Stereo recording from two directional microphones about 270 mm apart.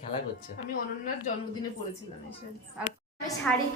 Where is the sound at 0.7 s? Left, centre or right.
Left.